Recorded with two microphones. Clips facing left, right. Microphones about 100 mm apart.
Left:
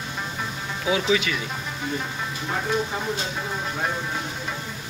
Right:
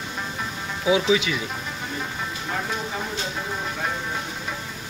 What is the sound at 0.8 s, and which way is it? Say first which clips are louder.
Speech: right 2 dB; 15° right (ahead or behind).